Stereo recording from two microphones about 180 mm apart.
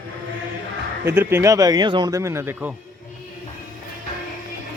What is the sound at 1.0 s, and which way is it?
Speech, 15° right (ahead or behind).